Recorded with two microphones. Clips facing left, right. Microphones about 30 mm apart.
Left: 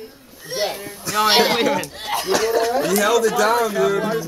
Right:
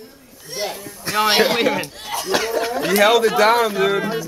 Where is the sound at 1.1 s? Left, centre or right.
Right.